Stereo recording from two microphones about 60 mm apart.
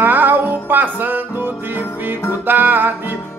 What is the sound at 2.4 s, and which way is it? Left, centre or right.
Music, right.